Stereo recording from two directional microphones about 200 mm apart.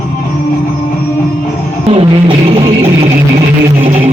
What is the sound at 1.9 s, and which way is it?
Music, 25° right (ahead or behind).